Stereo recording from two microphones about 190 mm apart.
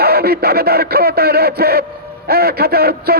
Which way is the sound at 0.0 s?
55° right (ahead or behind).